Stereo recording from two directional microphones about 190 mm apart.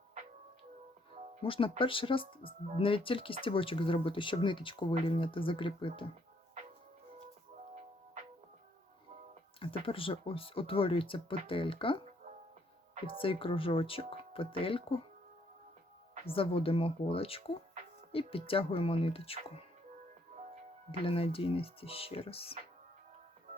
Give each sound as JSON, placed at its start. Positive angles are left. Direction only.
{"t": 1.4, "sound": "speech", "side_deg": 30}
{"t": 9.6, "sound": "speech", "side_deg": 30}
{"t": 13.2, "sound": "speech", "side_deg": 30}
{"t": 16.2, "sound": "speech", "side_deg": 30}
{"t": 21.0, "sound": "speech", "side_deg": 30}